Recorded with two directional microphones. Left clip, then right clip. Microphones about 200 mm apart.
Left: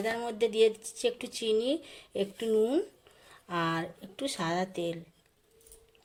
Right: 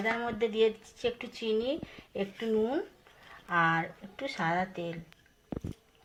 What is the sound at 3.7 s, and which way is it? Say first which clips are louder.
Speech: right 3 dB; 50° left (ahead or behind).